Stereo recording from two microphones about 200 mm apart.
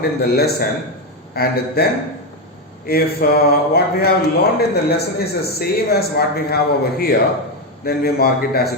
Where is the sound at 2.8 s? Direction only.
50° left (ahead or behind).